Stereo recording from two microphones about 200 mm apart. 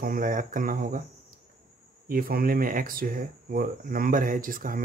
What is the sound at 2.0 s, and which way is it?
Speech, 45° right (ahead or behind).